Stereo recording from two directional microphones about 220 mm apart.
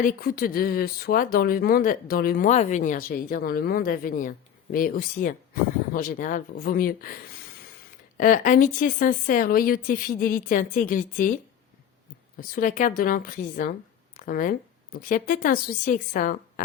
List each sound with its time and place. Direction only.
0.0 s speech: 40° left (ahead or behind)
8.2 s speech: 40° left (ahead or behind)
12.4 s speech: 40° left (ahead or behind)